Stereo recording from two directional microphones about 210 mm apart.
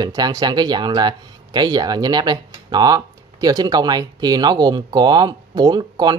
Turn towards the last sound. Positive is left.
turn(degrees=-20)  # may be behind; listen again after turning